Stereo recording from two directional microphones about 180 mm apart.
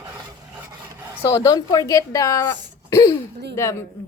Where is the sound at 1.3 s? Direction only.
15° left (ahead or behind).